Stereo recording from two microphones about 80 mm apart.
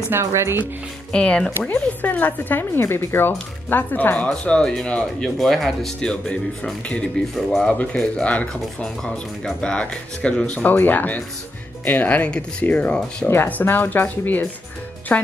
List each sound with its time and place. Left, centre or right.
0.1 s speech: right
1.1 s speech: centre
1.7 s speech: left